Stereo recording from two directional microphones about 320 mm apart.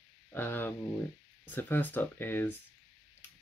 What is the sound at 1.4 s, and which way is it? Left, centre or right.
Speech, centre.